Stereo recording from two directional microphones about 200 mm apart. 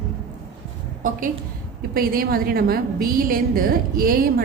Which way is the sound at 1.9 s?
45° right (ahead or behind).